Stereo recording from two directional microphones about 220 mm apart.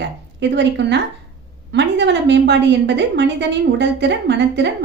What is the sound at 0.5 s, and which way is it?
Speech, 50° right (ahead or behind).